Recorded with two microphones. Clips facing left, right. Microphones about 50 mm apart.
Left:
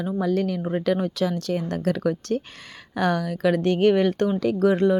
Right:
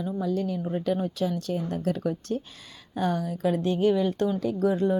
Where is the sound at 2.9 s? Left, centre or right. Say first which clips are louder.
Left 4 dB; left.